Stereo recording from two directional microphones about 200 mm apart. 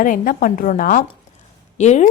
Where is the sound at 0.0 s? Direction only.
45° left (ahead or behind).